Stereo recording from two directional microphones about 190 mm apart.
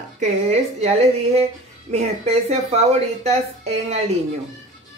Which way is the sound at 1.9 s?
35° right (ahead or behind).